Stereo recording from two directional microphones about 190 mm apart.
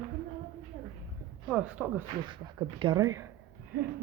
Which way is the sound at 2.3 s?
25° right (ahead or behind).